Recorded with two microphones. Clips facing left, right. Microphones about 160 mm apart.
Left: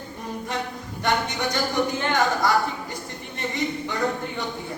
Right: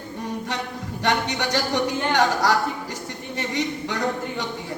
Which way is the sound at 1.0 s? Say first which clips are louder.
Right 1 dB; 75° right (ahead or behind).